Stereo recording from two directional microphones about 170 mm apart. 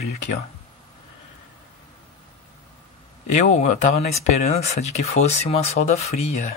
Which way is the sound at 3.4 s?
45° left (ahead or behind).